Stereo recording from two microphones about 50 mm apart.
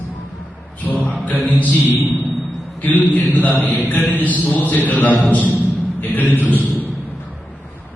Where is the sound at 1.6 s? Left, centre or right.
Left.